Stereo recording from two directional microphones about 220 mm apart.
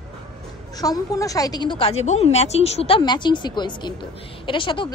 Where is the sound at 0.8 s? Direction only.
15° left (ahead or behind).